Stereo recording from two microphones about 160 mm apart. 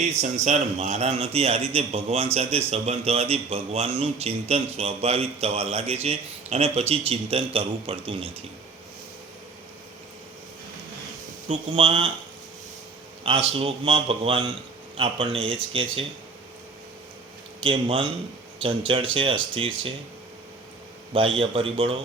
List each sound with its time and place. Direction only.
0.0 s a man's voice: 45° right (ahead or behind)
11.4 s a man's voice: 35° right (ahead or behind)
13.2 s a man's voice: 35° right (ahead or behind)
17.6 s a man's voice: 35° right (ahead or behind)
21.1 s a man's voice: 35° right (ahead or behind)